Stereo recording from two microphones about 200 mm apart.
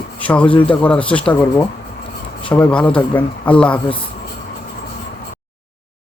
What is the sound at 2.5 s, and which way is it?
A man's voice, 5° left (ahead or behind).